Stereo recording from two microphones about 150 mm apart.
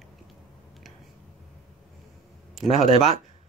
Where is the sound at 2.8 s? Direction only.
50° right (ahead or behind).